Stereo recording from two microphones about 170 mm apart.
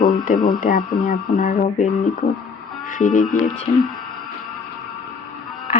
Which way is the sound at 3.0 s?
50° left (ahead or behind).